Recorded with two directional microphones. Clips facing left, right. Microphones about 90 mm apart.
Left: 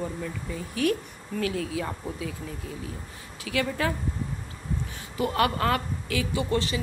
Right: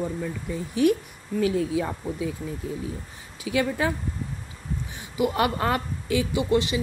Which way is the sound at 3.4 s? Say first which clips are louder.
Right 3 dB; 20° right (ahead or behind).